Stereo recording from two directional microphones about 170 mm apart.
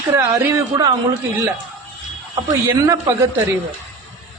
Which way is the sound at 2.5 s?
20° right (ahead or behind).